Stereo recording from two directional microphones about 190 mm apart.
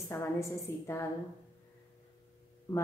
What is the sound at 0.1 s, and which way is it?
Speech, 15° left (ahead or behind).